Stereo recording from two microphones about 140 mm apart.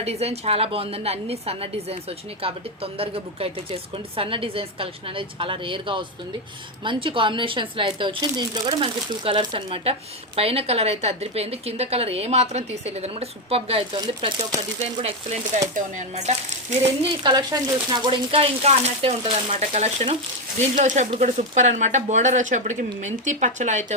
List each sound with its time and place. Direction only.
0.0 s a woman's voice: 45° right (ahead or behind)
13.9 s speech: 35° right (ahead or behind)
14.8 s a woman's voice: 50° right (ahead or behind)
15.7 s speech: 60° right (ahead or behind)
17.2 s a woman's voice: 30° right (ahead or behind); by 20.1 s 50° right (ahead or behind)
20.6 s speech: 60° right (ahead or behind)